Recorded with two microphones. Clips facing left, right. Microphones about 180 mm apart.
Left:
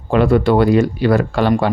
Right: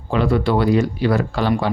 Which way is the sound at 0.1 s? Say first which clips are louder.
Left 5 dB; 55° left (ahead or behind).